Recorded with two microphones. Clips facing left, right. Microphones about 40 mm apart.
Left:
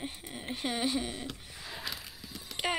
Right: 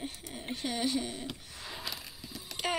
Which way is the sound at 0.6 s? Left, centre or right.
Centre.